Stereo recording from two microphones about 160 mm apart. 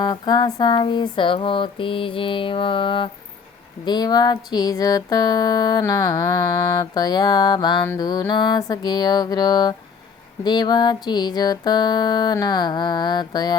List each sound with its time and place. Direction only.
0.0 s speech: 25° left (ahead or behind)
3.8 s music: 25° left (ahead or behind)